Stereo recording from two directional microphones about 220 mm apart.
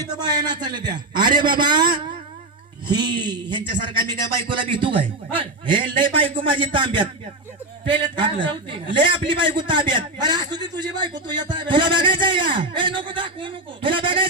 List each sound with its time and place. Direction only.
0.1 s a man's voice: 20° right (ahead or behind)